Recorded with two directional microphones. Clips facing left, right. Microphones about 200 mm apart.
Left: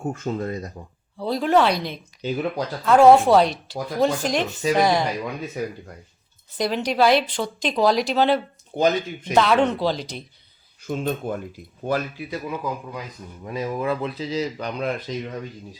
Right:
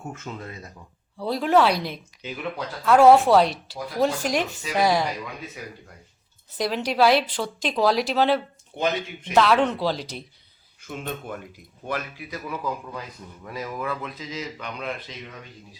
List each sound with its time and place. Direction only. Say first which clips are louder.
0.1 s speech: left 11 dB; 40° left (ahead or behind)
1.2 s speech: left 1 dB; 5° right (ahead or behind)
2.2 s speech: left 7 dB; 35° left (ahead or behind)
2.8 s speech: left 1 dB; 5° right (ahead or behind)
6.6 s speech: left 1 dB; 5° right (ahead or behind)
8.7 s speech: left 5 dB; 40° left (ahead or behind)
9.3 s speech: left 1 dB; centre (ahead or behind)
10.8 s speech: left 7 dB; 35° left (ahead or behind)
12.6 s speech: left 1 dB; 15° left (ahead or behind); by 15.3 s 40° left (ahead or behind)